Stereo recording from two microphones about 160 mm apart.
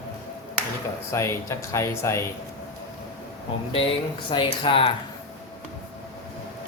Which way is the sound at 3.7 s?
35° left (ahead or behind).